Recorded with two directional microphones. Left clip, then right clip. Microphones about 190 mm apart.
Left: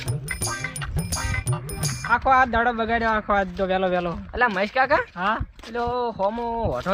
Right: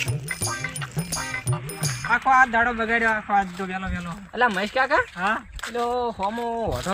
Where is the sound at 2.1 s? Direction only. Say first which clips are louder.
Right 1 dB; 35° left (ahead or behind).